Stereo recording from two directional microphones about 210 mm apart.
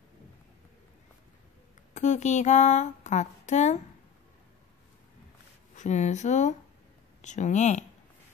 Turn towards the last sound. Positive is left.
turn(degrees=35)  # may be behind; listen again after turning